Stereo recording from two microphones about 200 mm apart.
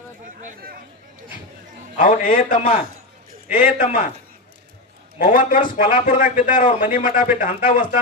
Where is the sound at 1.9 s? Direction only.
40° left (ahead or behind).